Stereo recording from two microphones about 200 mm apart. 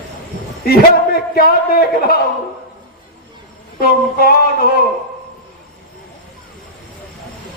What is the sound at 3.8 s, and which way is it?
A man's voice, 50° left (ahead or behind).